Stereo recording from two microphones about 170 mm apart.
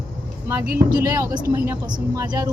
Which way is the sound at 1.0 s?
15° right (ahead or behind).